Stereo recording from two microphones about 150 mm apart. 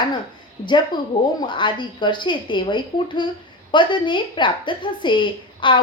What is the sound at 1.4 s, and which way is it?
A woman's voice, 30° left (ahead or behind).